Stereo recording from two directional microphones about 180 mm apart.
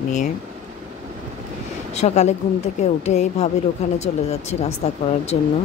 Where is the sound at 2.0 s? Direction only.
40° left (ahead or behind).